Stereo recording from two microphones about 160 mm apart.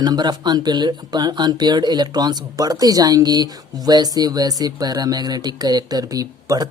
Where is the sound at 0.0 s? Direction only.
25° right (ahead or behind).